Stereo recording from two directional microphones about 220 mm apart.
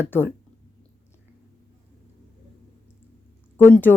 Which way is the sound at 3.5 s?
10° left (ahead or behind).